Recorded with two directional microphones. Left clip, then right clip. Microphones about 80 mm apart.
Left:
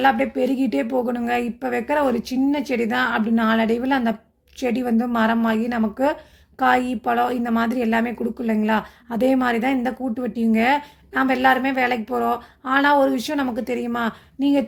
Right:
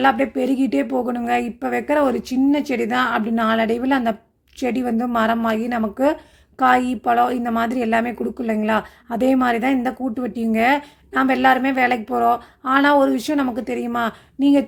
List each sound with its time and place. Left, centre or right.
0.0 s a woman's voice: right